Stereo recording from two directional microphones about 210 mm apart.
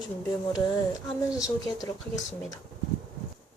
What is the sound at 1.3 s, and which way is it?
Speech, 15° left (ahead or behind).